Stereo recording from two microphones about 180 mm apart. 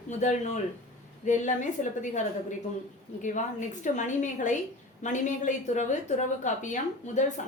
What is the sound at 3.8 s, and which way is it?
A woman's voice, 45° left (ahead or behind).